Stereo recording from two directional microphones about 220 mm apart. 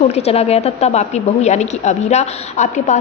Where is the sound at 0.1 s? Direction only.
30° left (ahead or behind).